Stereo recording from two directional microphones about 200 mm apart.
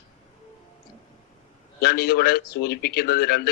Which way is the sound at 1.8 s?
50° left (ahead or behind).